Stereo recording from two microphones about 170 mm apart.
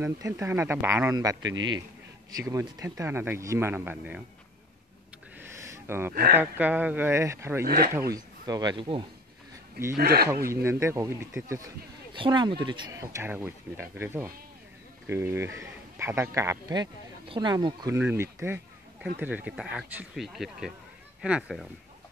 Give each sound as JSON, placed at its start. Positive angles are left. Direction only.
{"t": 0.0, "sound": "speech", "side_deg": -15}
{"t": 1.4, "sound": "a man's voice", "side_deg": -90}
{"t": 2.3, "sound": "speech", "side_deg": -20}
{"t": 5.4, "sound": "a sound", "side_deg": -15}
{"t": 6.3, "sound": "speech", "side_deg": -10}
{"t": 7.6, "sound": "speech", "side_deg": -60}
{"t": 7.9, "sound": "speech", "side_deg": -20}
{"t": 9.9, "sound": "speech", "side_deg": -65}
{"t": 10.3, "sound": "speech", "side_deg": -15}
{"t": 12.1, "sound": "speech", "side_deg": -25}